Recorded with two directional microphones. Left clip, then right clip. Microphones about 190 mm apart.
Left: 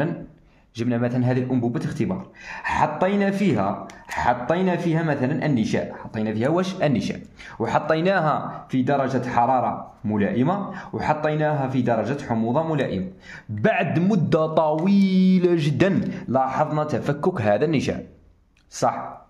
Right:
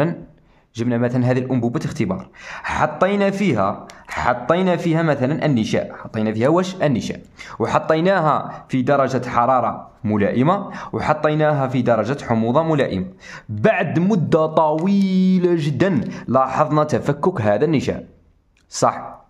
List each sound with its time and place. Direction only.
0.7 s speech: 25° right (ahead or behind)
16.1 s a man's voice: 25° right (ahead or behind)